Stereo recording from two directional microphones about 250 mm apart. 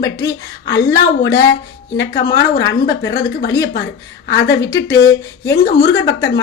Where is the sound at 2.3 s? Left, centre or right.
Left.